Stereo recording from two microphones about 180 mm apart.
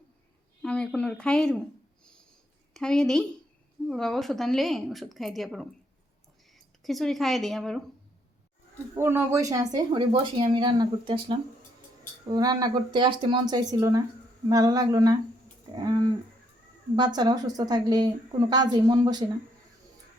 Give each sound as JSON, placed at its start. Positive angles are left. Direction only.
{"t": 0.6, "sound": "a woman's voice", "side_deg": 5}
{"t": 2.7, "sound": "a woman's voice", "side_deg": 5}
{"t": 9.0, "sound": "speech", "side_deg": -15}